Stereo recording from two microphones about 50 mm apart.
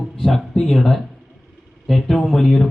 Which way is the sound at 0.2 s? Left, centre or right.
Centre.